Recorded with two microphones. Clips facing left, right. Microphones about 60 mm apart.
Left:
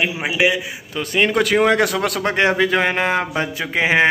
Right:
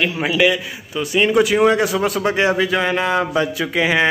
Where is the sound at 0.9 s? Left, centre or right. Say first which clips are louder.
Right 2 dB; left.